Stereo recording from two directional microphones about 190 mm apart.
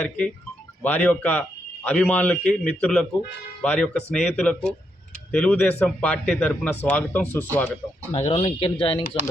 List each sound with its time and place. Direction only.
0.8 s a man's voice: 10° left (ahead or behind)
8.1 s speech: 30° left (ahead or behind)